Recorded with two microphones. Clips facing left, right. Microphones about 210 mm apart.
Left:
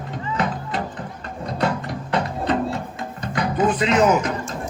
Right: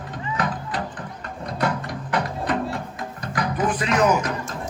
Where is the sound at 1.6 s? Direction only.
25° left (ahead or behind).